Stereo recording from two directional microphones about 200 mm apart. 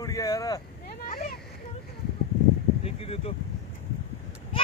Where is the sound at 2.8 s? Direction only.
30° left (ahead or behind).